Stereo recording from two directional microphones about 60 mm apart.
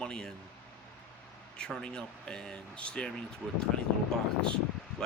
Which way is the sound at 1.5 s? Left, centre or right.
Centre.